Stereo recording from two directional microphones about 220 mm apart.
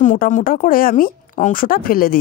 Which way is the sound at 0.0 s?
35° left (ahead or behind).